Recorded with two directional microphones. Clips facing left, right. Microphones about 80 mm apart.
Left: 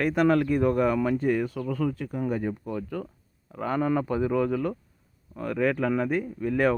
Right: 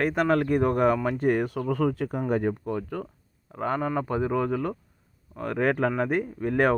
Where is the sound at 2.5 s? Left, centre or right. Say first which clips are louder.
Right 2 dB; right.